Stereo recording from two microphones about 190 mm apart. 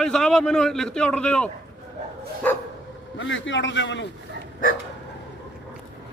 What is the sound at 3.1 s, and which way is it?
Speech, 75° left (ahead or behind).